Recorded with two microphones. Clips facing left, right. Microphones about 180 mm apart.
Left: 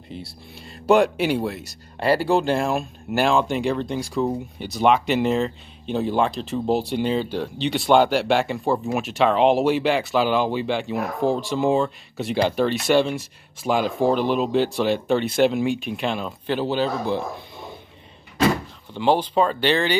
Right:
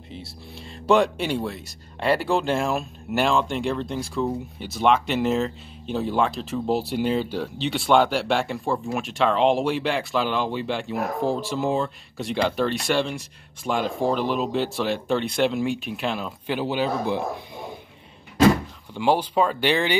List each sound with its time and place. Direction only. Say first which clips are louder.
0.8 s speech: left 2 dB; 5° left (ahead or behind)
8.7 s speech: left 3 dB; 15° left (ahead or behind)
9.0 s speech: left 2 dB; 5° left (ahead or behind); by 17.2 s 15° right (ahead or behind)
18.9 s speech: left 2 dB; 10° right (ahead or behind)